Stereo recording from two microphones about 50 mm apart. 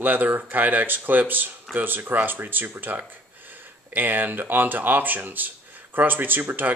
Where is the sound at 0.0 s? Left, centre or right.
Right.